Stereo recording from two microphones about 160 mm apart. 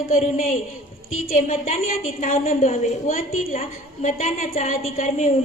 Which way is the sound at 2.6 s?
45° left (ahead or behind).